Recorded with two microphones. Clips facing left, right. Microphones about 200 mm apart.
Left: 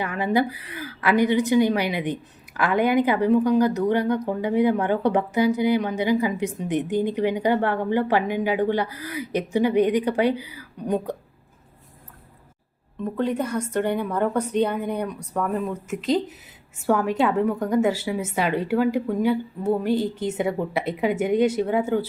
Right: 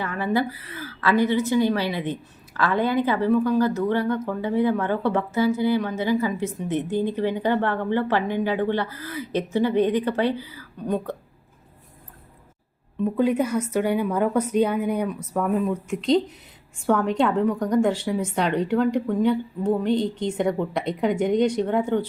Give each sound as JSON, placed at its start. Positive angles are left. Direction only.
{"t": 0.0, "sound": "a woman's voice", "side_deg": 15}
{"t": 13.1, "sound": "a woman's voice", "side_deg": -10}